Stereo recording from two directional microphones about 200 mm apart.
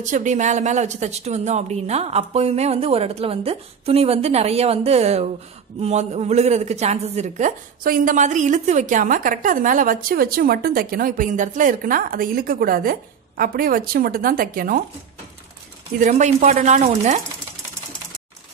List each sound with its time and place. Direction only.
0.0 s a woman's voice: 40° right (ahead or behind)
16.0 s a woman's voice: 40° right (ahead or behind)